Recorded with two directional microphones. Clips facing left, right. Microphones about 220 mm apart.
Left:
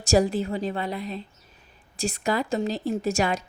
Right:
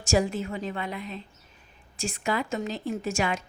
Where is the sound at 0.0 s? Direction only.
35° left (ahead or behind).